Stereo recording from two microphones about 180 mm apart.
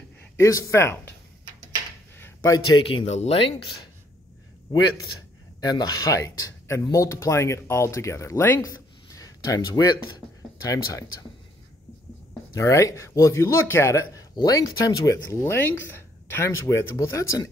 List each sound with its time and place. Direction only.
0.4 s speech: 15° left (ahead or behind)
2.1 s speech: 15° left (ahead or behind)
5.6 s speech: 20° left (ahead or behind)
12.5 s speech: 15° left (ahead or behind)